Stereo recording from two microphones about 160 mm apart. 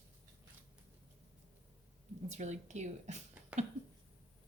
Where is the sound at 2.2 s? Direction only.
45° right (ahead or behind).